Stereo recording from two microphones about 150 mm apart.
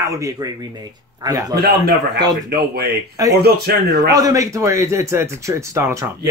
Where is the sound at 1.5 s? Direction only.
90° right.